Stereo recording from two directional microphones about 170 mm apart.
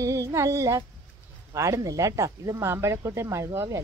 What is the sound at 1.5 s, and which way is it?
Speech, 15° right (ahead or behind).